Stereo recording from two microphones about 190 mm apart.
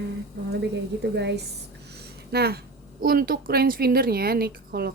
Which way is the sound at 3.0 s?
50° right (ahead or behind).